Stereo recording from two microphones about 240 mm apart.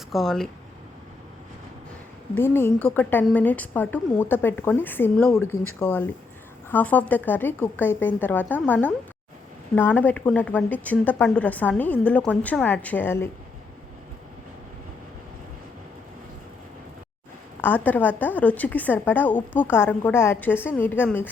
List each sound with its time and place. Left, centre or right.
0.1 s speech: centre
2.3 s a woman's voice: centre
17.6 s a woman's voice: centre